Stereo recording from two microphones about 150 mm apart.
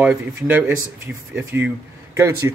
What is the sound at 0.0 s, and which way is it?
Speech, 10° right (ahead or behind).